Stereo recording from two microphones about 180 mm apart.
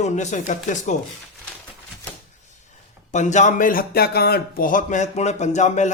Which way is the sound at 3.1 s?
40° left (ahead or behind).